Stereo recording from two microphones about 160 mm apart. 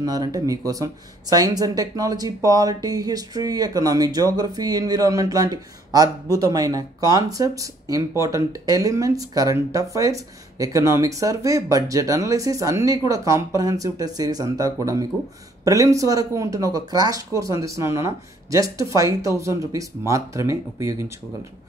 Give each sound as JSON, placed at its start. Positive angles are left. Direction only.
{"t": 0.0, "sound": "speech", "side_deg": -25}